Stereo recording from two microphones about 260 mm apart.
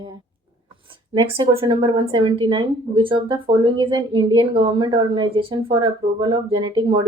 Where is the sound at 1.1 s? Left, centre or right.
Right.